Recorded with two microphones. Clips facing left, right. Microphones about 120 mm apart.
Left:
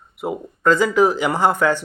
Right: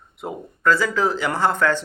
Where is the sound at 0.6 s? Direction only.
20° left (ahead or behind).